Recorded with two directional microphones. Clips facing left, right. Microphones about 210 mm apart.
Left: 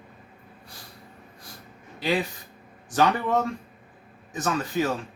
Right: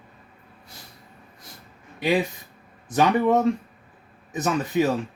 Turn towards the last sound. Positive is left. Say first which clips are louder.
# right 4 dB
turn(degrees=-20)  # may be behind; listen again after turning